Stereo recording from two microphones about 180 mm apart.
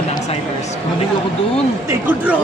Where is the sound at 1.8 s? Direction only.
10° right (ahead or behind).